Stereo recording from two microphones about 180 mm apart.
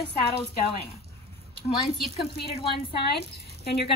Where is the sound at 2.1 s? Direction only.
60° left (ahead or behind).